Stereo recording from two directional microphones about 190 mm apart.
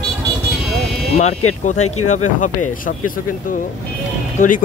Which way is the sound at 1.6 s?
40° left (ahead or behind).